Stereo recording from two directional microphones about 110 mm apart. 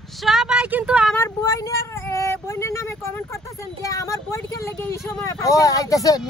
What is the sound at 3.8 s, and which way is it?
Speech, 30° left (ahead or behind).